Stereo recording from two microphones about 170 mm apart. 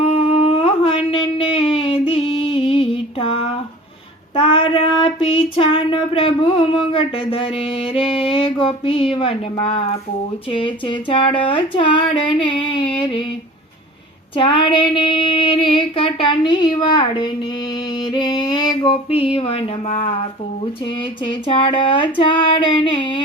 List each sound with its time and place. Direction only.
0.0 s humming: 35° left (ahead or behind)
1.4 s a sound: 35° left (ahead or behind)
4.4 s child singing: 30° left (ahead or behind)
6.7 s music: 30° left (ahead or behind)
10.5 s child singing: 30° left (ahead or behind)
14.3 s child singing: 30° left (ahead or behind)
17.9 s music: 25° left (ahead or behind)
21.2 s child singing: 30° left (ahead or behind)